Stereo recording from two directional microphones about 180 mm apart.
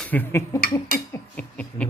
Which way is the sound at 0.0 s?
10° left (ahead or behind).